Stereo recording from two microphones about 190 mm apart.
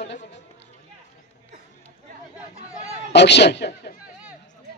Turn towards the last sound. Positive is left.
turn(degrees=60)  # may be behind; listen again after turning